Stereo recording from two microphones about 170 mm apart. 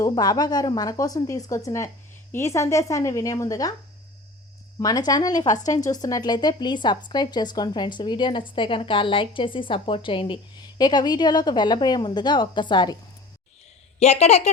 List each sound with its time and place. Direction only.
0.0 s speech: 20° left (ahead or behind)
4.8 s speech: 20° left (ahead or behind)
5.5 s speech: 45° left (ahead or behind)
5.7 s speech: 20° left (ahead or behind)
14.0 s a woman's voice: 40° left (ahead or behind)